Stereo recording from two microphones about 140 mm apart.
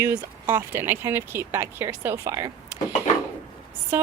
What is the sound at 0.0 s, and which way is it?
Speech, 20° right (ahead or behind).